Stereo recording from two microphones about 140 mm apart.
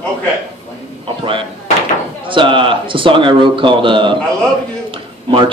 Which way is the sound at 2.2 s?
35° right (ahead or behind).